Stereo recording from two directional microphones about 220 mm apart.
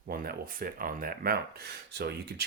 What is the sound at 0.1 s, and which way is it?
Speech, 40° right (ahead or behind).